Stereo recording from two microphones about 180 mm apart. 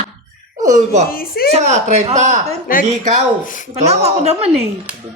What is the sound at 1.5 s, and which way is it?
A woman's voice, 40° right (ahead or behind).